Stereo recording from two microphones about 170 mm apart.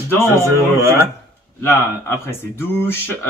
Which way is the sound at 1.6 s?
15° left (ahead or behind).